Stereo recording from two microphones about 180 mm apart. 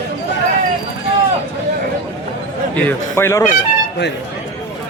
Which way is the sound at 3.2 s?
15° left (ahead or behind).